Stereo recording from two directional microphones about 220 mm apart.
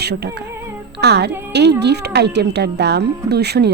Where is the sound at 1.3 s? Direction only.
10° right (ahead or behind).